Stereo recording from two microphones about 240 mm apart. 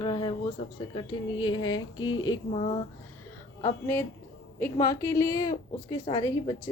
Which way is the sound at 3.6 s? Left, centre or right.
Centre.